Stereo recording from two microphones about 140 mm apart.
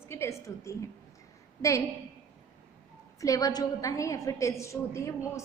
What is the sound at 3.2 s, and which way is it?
A woman's voice, 25° left (ahead or behind).